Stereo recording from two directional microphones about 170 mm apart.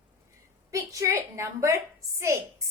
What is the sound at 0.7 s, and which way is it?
A woman's voice, 20° right (ahead or behind).